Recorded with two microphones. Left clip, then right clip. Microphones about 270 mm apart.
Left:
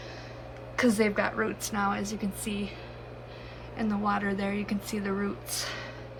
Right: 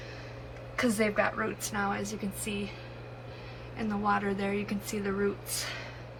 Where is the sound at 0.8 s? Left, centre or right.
Centre.